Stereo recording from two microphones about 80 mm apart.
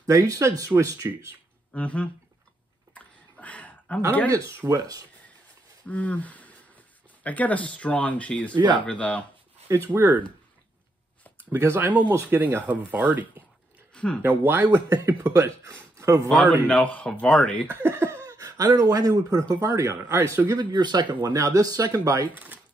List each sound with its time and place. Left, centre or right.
0.0 s speech: right
1.7 s speech: centre
2.9 s a sound: centre
4.3 s speech: right
5.9 s speech: centre
9.7 s speech: right
11.5 s speech: right
13.9 s speech: centre
14.2 s speech: right
14.9 s speech: right
16.3 s speech: centre
17.6 s speech: right
20.5 s speech: right
21.3 s speech: right